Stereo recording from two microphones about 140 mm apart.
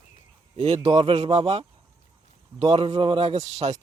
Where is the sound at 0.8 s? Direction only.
45° right (ahead or behind).